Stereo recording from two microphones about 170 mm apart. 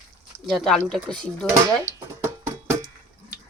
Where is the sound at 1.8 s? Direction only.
15° right (ahead or behind).